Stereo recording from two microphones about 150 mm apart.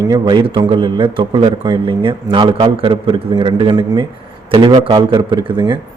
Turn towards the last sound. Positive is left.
turn(degrees=-30)  # may be behind; listen again after turning